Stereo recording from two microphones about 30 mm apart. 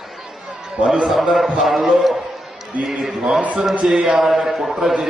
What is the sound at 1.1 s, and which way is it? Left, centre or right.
A man's voice, centre.